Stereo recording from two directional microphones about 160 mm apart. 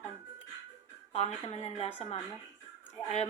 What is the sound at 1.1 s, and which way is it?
Speech, 40° left (ahead or behind).